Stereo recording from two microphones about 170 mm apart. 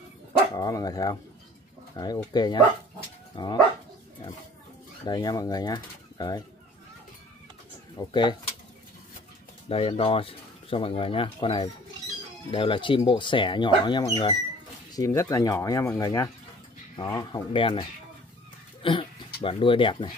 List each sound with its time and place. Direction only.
0.6 s speech: 20° left (ahead or behind)
5.0 s speech: 25° left (ahead or behind)
8.0 s speech: 25° left (ahead or behind)
9.7 s speech: 35° left (ahead or behind)